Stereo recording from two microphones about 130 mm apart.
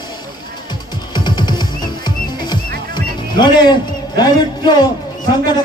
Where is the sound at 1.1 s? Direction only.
35° left (ahead or behind).